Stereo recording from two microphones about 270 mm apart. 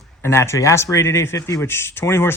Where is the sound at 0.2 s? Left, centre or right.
Centre.